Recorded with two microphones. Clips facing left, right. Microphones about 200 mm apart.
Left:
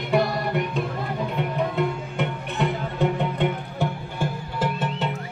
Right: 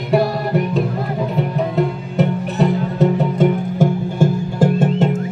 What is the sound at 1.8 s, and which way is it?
Music, 40° right (ahead or behind).